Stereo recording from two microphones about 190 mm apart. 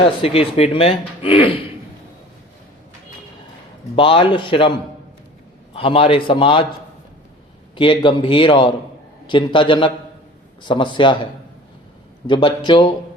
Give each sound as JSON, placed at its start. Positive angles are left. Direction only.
{"t": 0.2, "sound": "speech", "side_deg": 30}
{"t": 3.9, "sound": "speech", "side_deg": 30}
{"t": 5.7, "sound": "speech", "side_deg": 30}
{"t": 7.8, "sound": "speech", "side_deg": 25}
{"t": 12.3, "sound": "speech", "side_deg": 25}